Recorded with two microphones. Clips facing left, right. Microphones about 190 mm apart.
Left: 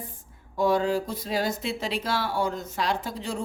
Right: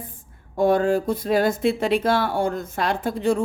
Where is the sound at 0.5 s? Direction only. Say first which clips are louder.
Right 5 dB; 55° right (ahead or behind).